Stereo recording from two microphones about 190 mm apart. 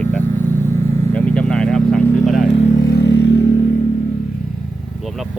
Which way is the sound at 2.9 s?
60° left (ahead or behind).